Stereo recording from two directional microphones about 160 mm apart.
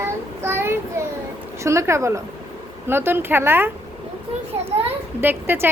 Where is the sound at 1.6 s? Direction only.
15° right (ahead or behind).